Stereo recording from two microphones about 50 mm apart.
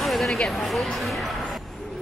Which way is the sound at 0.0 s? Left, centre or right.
Centre.